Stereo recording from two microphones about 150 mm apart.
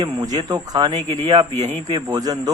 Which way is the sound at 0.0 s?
30° right (ahead or behind).